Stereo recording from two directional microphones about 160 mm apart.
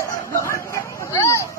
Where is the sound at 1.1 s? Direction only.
20° left (ahead or behind).